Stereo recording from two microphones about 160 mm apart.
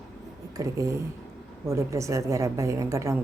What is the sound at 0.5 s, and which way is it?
A woman's voice, 20° right (ahead or behind).